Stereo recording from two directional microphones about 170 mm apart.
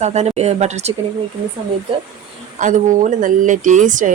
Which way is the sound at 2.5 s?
45° right (ahead or behind).